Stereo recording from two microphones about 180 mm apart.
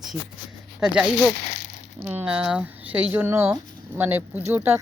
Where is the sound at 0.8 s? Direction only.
5° right (ahead or behind).